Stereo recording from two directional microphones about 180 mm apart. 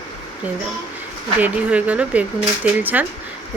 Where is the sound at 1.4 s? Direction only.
10° right (ahead or behind).